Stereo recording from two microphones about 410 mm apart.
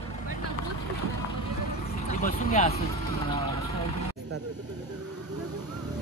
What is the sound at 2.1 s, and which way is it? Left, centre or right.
Speech, centre.